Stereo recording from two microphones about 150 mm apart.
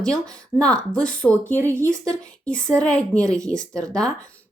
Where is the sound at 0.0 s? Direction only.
5° left (ahead or behind).